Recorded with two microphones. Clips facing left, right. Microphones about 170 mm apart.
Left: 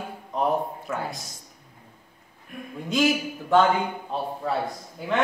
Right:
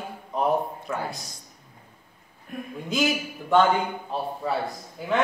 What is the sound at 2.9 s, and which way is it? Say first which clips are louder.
A man's voice: left 3 dB; centre (ahead or behind).